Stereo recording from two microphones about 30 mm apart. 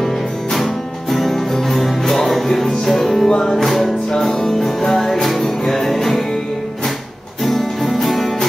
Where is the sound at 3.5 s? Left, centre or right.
Centre.